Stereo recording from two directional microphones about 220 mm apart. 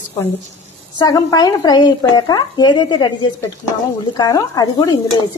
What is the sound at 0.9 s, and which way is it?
A woman's voice, 15° left (ahead or behind).